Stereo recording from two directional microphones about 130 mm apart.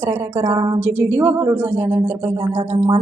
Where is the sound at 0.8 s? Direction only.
15° right (ahead or behind).